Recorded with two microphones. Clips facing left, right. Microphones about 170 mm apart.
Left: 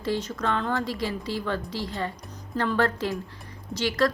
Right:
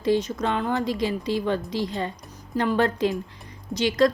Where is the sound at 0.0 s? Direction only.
15° right (ahead or behind).